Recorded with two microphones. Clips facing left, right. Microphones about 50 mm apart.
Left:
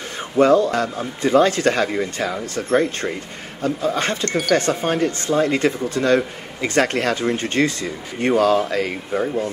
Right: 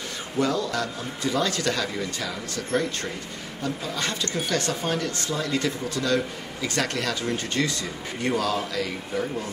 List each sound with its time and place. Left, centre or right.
0.4 s speech: left
4.2 s speech: left
4.6 s speech: left